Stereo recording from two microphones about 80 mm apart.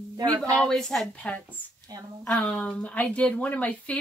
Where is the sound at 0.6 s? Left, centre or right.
Centre.